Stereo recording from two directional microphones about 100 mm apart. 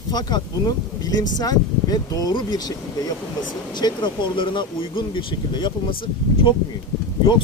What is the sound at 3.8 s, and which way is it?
Speech, 50° left (ahead or behind).